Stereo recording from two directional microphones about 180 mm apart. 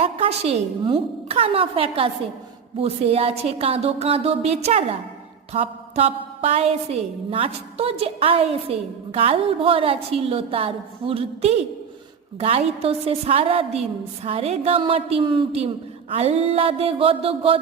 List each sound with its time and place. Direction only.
0.0 s a woman's voice: 35° right (ahead or behind)